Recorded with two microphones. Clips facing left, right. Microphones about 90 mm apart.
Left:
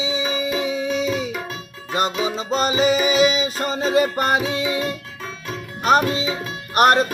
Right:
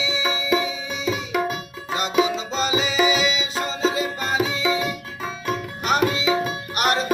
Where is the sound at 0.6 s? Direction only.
65° left (ahead or behind).